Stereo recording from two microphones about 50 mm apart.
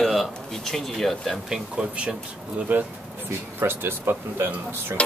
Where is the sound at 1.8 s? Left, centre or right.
Right.